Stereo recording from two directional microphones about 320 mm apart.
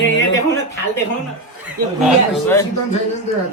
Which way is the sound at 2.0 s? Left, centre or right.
Centre.